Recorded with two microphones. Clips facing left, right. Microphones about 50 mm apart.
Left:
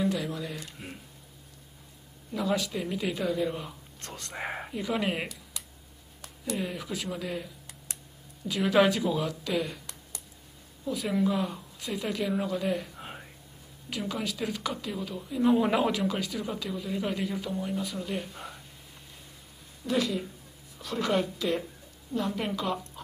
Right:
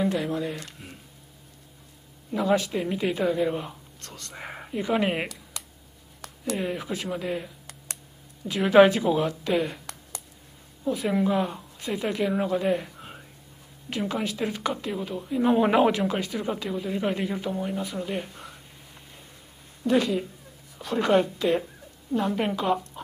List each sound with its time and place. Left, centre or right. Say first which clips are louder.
0.1 s speech: right 5 dB; right
0.6 s speech: right 1 dB; centre
2.3 s speech: right 5 dB; right
4.3 s speech: left 4 dB; centre
4.7 s speech: right 6 dB; right
6.6 s speech: right 4 dB; right
8.7 s speech: right 7 dB; right
10.9 s speech: right 4 dB; right
13.0 s a sound: left 1 dB; centre
13.8 s speech: right 4 dB; right
18.3 s a sound: left 1 dB; centre
19.8 s speech: right 5 dB; centre